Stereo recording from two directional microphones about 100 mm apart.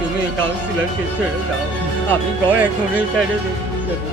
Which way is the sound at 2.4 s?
15° right (ahead or behind).